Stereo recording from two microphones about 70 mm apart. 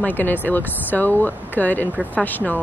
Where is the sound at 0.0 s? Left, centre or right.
Left.